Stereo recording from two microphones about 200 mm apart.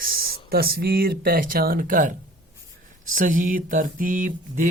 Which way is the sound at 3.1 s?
40° right (ahead or behind).